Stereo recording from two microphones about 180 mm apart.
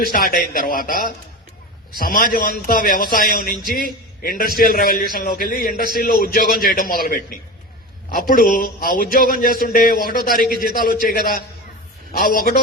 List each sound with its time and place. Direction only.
0.0 s a man's voice: 50° left (ahead or behind)